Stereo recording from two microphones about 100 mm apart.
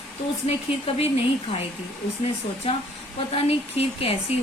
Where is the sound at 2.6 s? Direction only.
70° left (ahead or behind).